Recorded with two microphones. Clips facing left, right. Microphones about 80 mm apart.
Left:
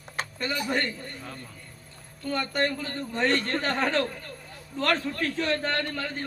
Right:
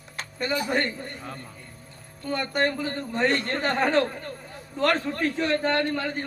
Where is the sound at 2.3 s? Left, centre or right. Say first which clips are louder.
Right 2 dB; right.